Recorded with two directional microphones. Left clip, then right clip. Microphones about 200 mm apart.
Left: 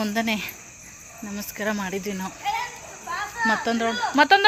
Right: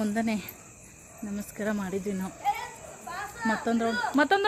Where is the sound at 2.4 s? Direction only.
50° right (ahead or behind).